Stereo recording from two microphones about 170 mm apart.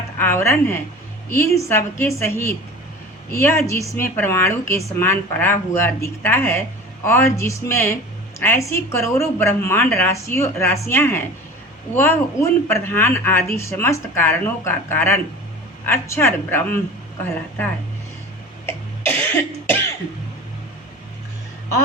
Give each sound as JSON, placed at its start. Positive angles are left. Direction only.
{"t": 0.2, "sound": "a woman's voice", "side_deg": 15}
{"t": 18.6, "sound": "cough", "side_deg": 15}